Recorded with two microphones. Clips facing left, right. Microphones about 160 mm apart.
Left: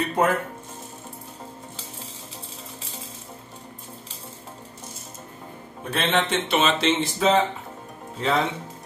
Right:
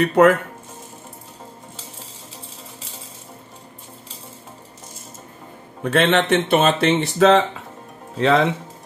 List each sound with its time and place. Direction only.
0.0 s speech: 70° right (ahead or behind)
5.9 s speech: 75° right (ahead or behind)